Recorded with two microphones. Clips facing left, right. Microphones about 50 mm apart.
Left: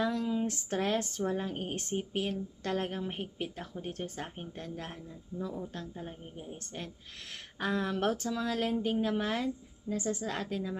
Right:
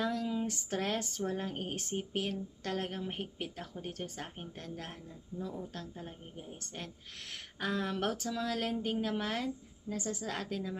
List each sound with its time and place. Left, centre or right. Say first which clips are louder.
0.0 s a woman's voice: left 3 dB; centre
8.0 s a woman's voice: left 3 dB; centre